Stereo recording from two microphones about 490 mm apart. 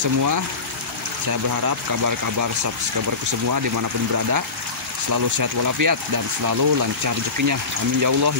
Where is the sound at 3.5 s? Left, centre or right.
Right.